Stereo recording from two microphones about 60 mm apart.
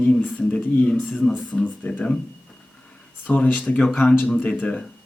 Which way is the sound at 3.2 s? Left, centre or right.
Left.